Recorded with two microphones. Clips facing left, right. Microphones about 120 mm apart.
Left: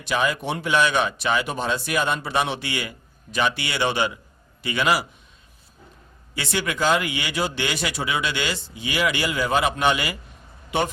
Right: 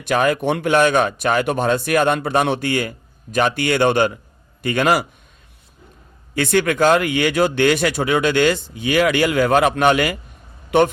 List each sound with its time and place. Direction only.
0.0 s speech: 55° right (ahead or behind)
6.3 s a man's voice: 50° right (ahead or behind)